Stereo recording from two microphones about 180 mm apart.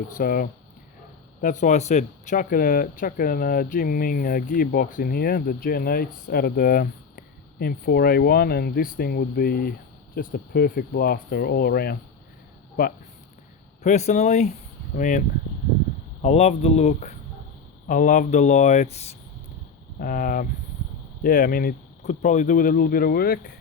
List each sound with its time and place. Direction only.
0.2 s speech: 50° left (ahead or behind)
13.8 s speech: 40° left (ahead or behind)
16.2 s speech: 35° left (ahead or behind)
17.8 s speech: 50° left (ahead or behind)
20.0 s speech: 50° left (ahead or behind)